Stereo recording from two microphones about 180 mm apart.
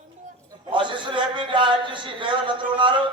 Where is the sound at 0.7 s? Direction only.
25° right (ahead or behind).